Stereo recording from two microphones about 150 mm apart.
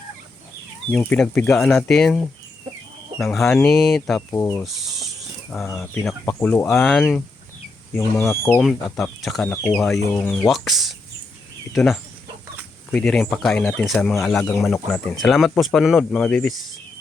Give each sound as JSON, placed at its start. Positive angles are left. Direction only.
{"t": 0.9, "sound": "speech", "side_deg": 0}
{"t": 4.3, "sound": "speech", "side_deg": 15}
{"t": 5.7, "sound": "speech", "side_deg": 5}
{"t": 8.3, "sound": "speech", "side_deg": 15}
{"t": 8.6, "sound": "speech", "side_deg": 0}
{"t": 9.9, "sound": "speech", "side_deg": 10}